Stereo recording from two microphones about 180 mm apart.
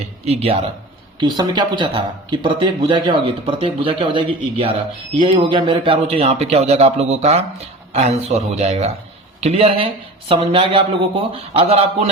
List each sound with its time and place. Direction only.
0.3 s a woman's voice: 35° right (ahead or behind)